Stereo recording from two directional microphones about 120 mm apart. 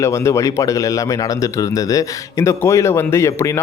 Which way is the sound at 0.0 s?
25° left (ahead or behind).